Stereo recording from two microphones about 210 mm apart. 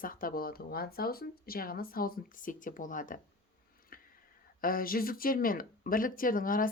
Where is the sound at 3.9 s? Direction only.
45° left (ahead or behind).